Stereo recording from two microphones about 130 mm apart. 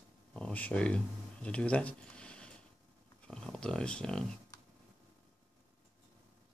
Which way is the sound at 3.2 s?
5° left (ahead or behind).